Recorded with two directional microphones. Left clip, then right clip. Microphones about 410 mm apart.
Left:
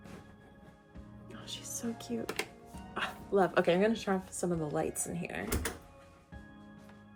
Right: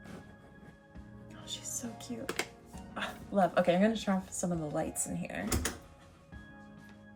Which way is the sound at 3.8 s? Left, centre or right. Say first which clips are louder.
Left 1 dB; centre.